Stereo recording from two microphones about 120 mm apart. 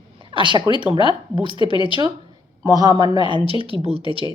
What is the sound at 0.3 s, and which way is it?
Speech, 40° right (ahead or behind).